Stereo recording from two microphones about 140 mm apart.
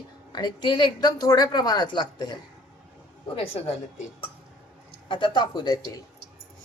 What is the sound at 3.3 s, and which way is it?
Speech, 40° left (ahead or behind).